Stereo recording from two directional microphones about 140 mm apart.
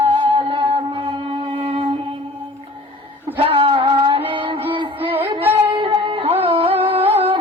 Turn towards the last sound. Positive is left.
turn(degrees=-45)  # may be behind; listen again after turning